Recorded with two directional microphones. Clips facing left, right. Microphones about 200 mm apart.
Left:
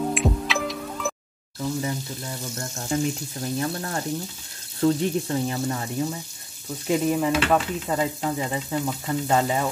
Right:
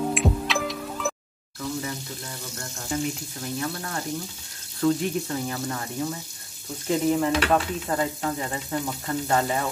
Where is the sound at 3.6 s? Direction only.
35° left (ahead or behind).